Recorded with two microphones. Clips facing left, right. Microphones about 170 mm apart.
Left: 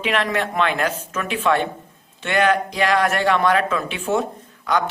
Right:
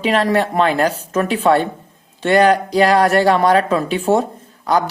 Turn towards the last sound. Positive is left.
turn(degrees=-35)  # may be behind; listen again after turning